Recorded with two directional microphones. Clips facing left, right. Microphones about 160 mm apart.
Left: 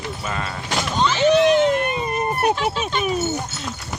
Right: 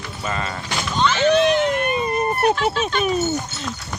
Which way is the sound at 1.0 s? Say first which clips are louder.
Left 1 dB; 15° left (ahead or behind).